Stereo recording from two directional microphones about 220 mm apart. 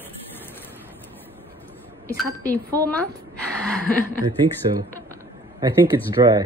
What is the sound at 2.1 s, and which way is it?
Speech, 10° left (ahead or behind).